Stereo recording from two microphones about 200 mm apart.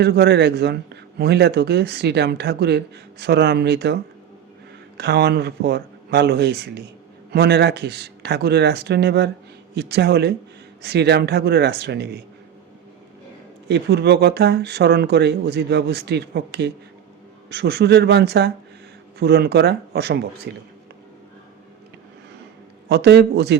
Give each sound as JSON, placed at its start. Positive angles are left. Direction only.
{"t": 0.0, "sound": "a man's voice", "side_deg": -55}
{"t": 4.9, "sound": "a man's voice", "side_deg": -55}
{"t": 13.7, "sound": "a man's voice", "side_deg": -55}
{"t": 22.9, "sound": "a man's voice", "side_deg": -60}